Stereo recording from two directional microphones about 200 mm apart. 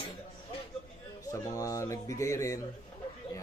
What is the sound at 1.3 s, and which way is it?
A man's voice, 15° left (ahead or behind).